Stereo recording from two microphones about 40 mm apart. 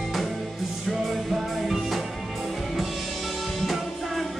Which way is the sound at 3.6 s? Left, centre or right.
Centre.